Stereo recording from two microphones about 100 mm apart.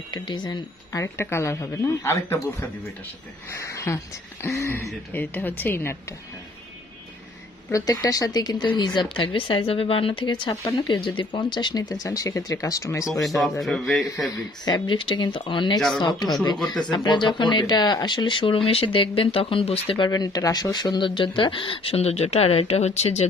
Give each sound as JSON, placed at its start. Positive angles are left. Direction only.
{"t": 0.1, "sound": "speech", "side_deg": 50}
{"t": 0.9, "sound": "speech", "side_deg": 25}
{"t": 7.7, "sound": "speech", "side_deg": 40}
{"t": 13.4, "sound": "speech", "side_deg": 0}
{"t": 14.3, "sound": "speech", "side_deg": 45}
{"t": 15.0, "sound": "speech", "side_deg": 55}
{"t": 20.1, "sound": "speech", "side_deg": 40}